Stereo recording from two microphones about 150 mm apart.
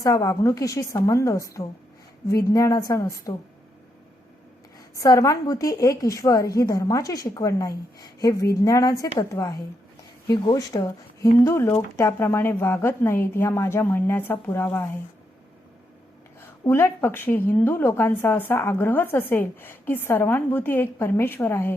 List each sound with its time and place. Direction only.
0.0 s a woman's voice: 25° left (ahead or behind)
4.9 s a woman's voice: 20° left (ahead or behind)
16.4 s a woman's voice: 15° left (ahead or behind)